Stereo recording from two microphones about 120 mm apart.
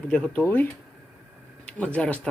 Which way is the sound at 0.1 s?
10° left (ahead or behind).